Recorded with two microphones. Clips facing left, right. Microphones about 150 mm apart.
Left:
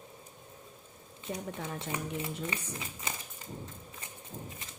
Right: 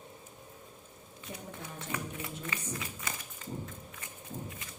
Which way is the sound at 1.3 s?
90° left.